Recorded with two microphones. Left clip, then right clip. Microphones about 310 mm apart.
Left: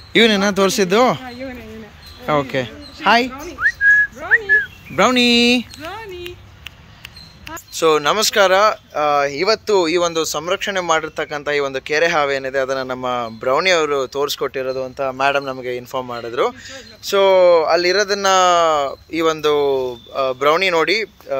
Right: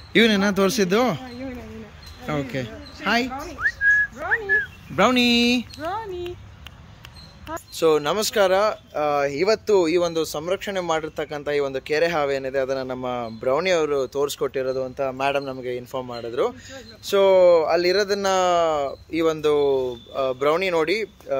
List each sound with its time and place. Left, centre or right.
0.1 s speech: centre
2.2 s speech: centre
3.4 s whistling: centre
4.3 s a sound: centre
5.8 s a sound: right
7.7 s speech: centre